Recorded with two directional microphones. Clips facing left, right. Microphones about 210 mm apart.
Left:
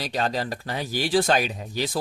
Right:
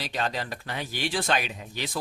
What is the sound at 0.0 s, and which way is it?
Speech, 40° left (ahead or behind).